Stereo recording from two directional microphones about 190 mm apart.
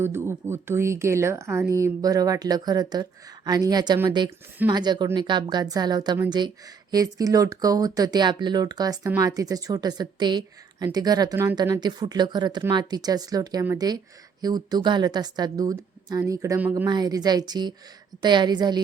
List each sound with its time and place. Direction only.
0.0 s a woman's voice: 10° right (ahead or behind)